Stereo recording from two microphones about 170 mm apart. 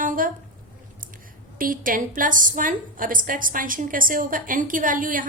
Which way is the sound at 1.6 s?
55° right (ahead or behind).